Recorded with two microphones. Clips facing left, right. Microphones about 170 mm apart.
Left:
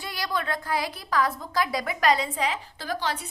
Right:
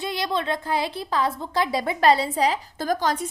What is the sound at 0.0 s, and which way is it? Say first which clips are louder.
A woman's voice: right 5 dB; 25° right (ahead or behind).